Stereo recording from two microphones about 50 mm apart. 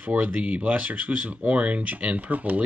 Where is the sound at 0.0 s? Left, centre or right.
Right.